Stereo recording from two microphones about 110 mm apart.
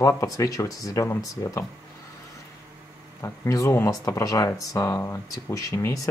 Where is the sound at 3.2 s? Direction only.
30° left (ahead or behind).